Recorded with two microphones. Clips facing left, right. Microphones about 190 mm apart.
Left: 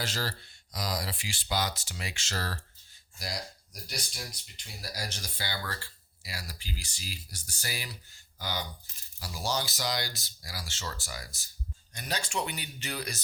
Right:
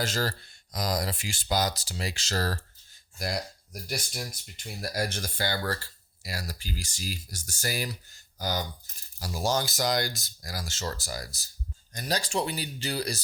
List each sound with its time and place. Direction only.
0.0 s speech: 45° right (ahead or behind)
3.2 s speech: 55° right (ahead or behind); by 13.1 s 35° right (ahead or behind)